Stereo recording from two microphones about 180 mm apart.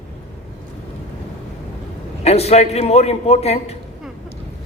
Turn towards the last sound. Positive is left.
turn(degrees=35)  # may be behind; listen again after turning